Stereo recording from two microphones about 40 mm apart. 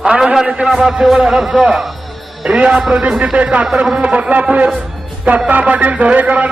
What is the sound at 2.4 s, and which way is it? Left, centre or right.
Speech, right.